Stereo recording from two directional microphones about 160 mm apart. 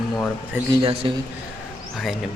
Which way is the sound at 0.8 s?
35° right (ahead or behind).